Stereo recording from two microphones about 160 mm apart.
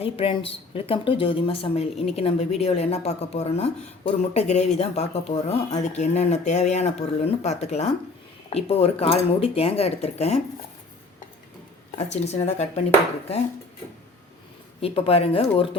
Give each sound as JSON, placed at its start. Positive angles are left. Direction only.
{"t": 0.0, "sound": "speech", "side_deg": 35}
{"t": 12.1, "sound": "speech", "side_deg": 40}
{"t": 14.8, "sound": "speech", "side_deg": 35}